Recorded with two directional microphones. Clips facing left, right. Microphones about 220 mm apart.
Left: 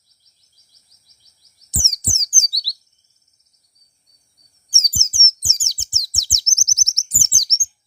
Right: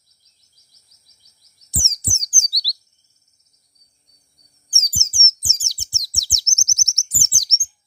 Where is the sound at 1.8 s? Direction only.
15° left (ahead or behind).